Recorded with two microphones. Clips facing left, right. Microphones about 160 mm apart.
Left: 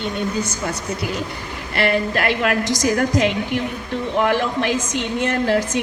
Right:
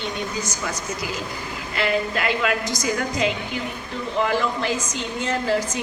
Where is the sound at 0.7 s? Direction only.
60° left (ahead or behind); by 2.9 s 90° left.